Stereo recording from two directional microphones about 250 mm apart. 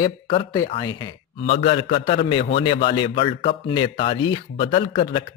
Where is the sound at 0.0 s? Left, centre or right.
Centre.